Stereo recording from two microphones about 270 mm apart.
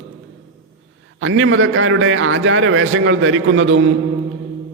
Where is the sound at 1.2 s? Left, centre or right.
Right.